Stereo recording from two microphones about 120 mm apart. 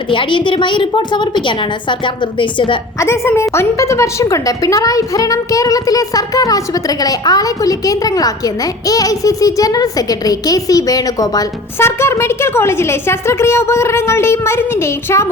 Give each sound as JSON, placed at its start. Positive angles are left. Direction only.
{"t": 0.1, "sound": "a woman's voice", "side_deg": 45}
{"t": 3.0, "sound": "a woman's voice", "side_deg": 20}